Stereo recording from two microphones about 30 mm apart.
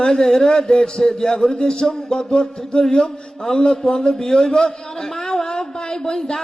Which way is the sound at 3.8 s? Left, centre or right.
Left.